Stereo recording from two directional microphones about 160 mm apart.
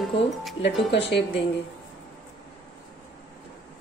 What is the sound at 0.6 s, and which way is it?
Speech, 90° left.